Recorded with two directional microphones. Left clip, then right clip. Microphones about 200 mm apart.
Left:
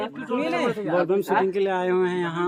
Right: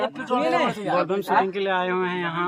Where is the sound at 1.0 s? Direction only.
15° left (ahead or behind).